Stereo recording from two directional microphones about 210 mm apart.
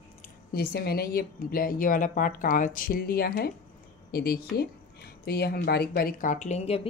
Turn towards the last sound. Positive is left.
turn(degrees=30)  # may be behind; listen again after turning